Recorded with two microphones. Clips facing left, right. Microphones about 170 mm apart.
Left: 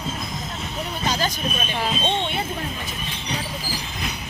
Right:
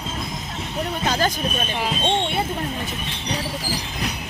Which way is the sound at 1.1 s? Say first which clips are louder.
Right 3 dB; 50° right (ahead or behind).